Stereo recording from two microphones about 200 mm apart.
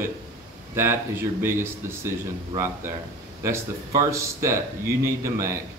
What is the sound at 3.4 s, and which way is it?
Speech, 15° right (ahead or behind).